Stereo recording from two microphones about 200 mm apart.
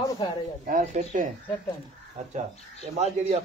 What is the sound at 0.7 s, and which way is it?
Speech, 40° right (ahead or behind).